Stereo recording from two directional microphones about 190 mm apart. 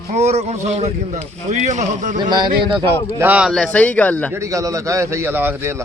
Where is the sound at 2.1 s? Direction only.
25° right (ahead or behind).